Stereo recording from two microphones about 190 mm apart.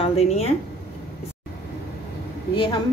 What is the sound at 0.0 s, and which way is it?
Speech, 35° left (ahead or behind).